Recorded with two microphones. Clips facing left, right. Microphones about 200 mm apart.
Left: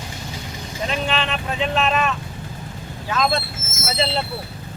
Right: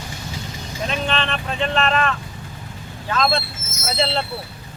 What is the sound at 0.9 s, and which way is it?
Speech, 5° left (ahead or behind).